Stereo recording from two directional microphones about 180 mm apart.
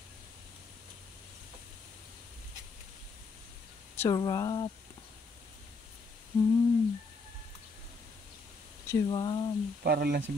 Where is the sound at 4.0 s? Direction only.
20° left (ahead or behind).